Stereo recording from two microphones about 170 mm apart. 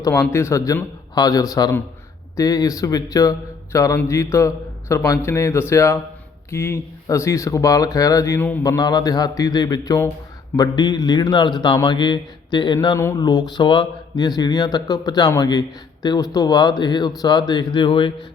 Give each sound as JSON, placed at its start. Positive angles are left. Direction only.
{"t": 0.0, "sound": "a man's voice", "side_deg": 15}